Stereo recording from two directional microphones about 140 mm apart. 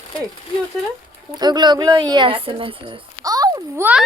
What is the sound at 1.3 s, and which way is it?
Speech, 30° right (ahead or behind).